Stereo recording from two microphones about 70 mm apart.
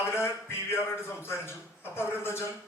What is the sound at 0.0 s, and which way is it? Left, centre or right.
A man's voice, left.